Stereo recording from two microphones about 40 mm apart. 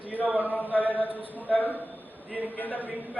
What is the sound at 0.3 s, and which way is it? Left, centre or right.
A man's voice, left.